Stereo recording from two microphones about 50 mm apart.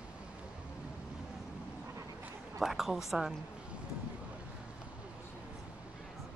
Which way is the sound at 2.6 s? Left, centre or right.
Centre.